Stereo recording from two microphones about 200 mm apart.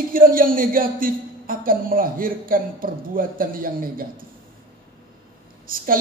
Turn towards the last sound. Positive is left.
turn(degrees=-45)  # may be behind; listen again after turning